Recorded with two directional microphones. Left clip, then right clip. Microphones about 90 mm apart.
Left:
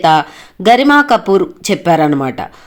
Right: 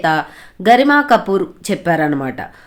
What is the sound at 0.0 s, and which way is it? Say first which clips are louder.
Speech: left 6 dB; 25° left (ahead or behind).